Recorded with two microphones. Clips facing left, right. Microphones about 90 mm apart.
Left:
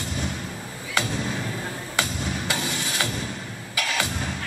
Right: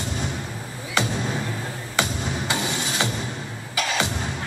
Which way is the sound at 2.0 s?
20° right (ahead or behind).